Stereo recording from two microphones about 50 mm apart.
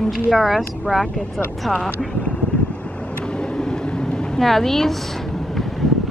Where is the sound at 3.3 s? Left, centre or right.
Centre.